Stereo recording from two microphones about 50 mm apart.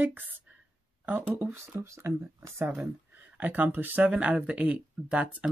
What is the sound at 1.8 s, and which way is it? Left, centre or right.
Speech, right.